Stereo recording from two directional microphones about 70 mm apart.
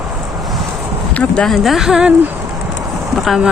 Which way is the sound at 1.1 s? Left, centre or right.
Centre.